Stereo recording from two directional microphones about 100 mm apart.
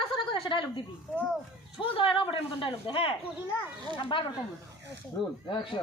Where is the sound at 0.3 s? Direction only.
55° left (ahead or behind).